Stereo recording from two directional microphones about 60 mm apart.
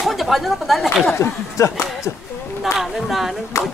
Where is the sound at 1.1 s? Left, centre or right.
Left.